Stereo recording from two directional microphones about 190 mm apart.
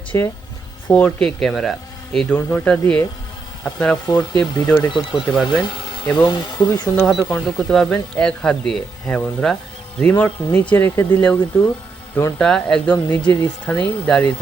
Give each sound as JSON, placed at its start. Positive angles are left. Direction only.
{"t": 0.1, "sound": "speech", "side_deg": 15}
{"t": 4.1, "sound": "speech", "side_deg": 20}
{"t": 5.2, "sound": "speech", "side_deg": 0}
{"t": 5.6, "sound": "speech", "side_deg": 25}
{"t": 7.0, "sound": "speech", "side_deg": 0}